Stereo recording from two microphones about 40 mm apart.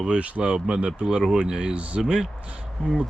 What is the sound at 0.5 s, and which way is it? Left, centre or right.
Speech, right.